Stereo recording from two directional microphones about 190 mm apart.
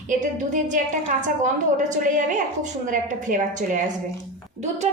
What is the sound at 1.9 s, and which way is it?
A woman's voice, 40° right (ahead or behind).